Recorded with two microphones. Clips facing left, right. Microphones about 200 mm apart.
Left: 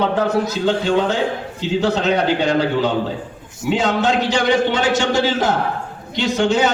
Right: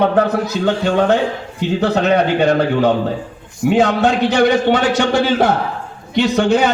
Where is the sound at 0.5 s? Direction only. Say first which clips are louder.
Right 1 dB; 60° right (ahead or behind).